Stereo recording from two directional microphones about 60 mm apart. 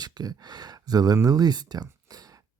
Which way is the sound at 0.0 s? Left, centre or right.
Right.